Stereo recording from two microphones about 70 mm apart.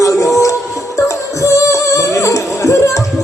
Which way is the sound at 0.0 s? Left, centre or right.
Left.